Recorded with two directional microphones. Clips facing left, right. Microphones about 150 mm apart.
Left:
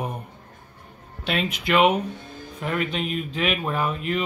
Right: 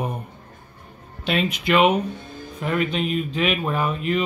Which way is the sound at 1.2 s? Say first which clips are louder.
Right 3 dB; centre (ahead or behind).